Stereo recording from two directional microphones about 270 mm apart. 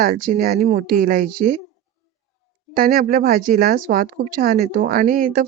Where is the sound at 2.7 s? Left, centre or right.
Right.